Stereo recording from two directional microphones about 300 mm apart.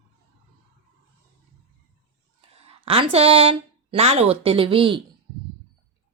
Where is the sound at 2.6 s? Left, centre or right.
Centre.